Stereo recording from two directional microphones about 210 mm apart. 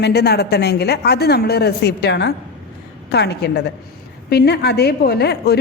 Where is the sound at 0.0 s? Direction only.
50° left (ahead or behind).